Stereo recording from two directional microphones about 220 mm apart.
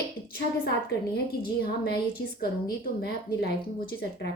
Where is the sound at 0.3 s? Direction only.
45° left (ahead or behind).